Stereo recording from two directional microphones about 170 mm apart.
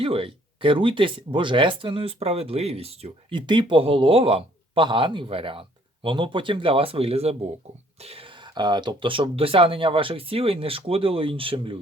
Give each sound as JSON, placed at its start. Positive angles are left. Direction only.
{"t": 0.0, "sound": "speech", "side_deg": -30}